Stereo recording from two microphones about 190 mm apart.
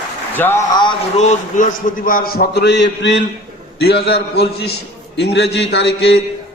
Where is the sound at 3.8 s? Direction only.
55° left (ahead or behind).